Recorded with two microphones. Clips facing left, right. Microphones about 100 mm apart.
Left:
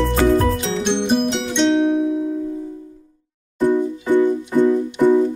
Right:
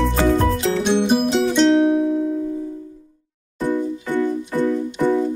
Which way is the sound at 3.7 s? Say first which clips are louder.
Left 4 dB; 15° left (ahead or behind).